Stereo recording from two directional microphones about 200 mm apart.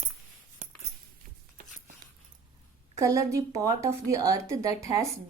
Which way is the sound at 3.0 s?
15° right (ahead or behind).